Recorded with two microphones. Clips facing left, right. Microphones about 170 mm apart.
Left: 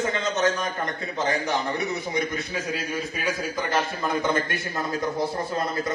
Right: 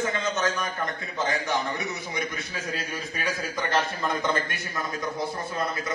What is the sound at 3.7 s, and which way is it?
Speech, 5° left (ahead or behind).